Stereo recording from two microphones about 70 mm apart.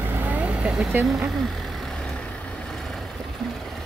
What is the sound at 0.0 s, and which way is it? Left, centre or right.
Vehicle, right.